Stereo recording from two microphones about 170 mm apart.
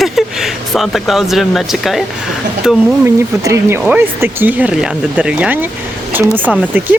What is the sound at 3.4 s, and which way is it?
Speech, 15° right (ahead or behind).